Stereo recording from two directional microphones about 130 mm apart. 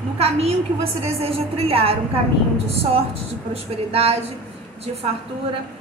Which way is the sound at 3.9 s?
50° right (ahead or behind).